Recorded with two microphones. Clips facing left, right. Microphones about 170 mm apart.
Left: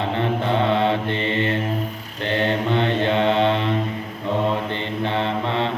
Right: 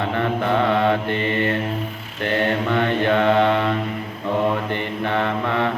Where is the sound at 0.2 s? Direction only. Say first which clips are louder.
Right 1 dB; 25° left (ahead or behind).